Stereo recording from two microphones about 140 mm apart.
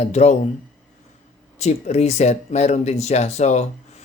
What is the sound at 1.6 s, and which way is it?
Speech, 55° left (ahead or behind).